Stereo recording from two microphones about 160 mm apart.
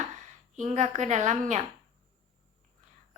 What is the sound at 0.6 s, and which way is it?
Speech, 45° right (ahead or behind).